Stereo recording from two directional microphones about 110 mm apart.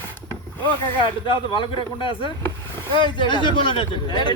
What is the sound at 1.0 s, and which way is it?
Speech, 50° left (ahead or behind).